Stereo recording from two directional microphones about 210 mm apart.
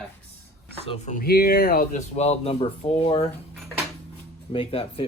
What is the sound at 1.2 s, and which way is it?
Speech, 45° left (ahead or behind).